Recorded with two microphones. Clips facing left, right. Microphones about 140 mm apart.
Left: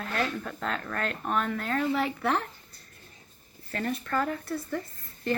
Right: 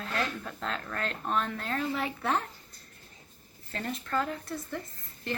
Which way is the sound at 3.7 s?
20° right (ahead or behind).